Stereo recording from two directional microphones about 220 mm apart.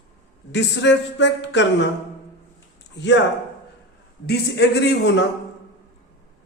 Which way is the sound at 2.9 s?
55° left (ahead or behind).